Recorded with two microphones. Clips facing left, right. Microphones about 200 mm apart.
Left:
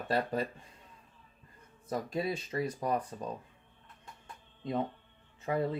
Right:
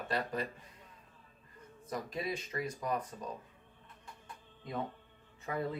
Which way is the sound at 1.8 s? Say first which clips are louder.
Left 4 dB; 30° left (ahead or behind).